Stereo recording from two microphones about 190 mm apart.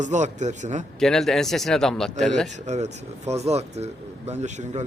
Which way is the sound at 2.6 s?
35° right (ahead or behind).